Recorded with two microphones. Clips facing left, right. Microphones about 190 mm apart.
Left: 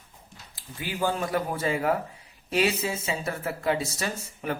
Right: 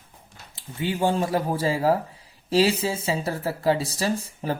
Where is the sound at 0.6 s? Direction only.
25° right (ahead or behind).